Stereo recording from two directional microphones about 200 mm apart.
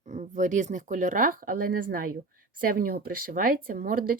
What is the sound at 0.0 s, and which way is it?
Speech, 35° right (ahead or behind).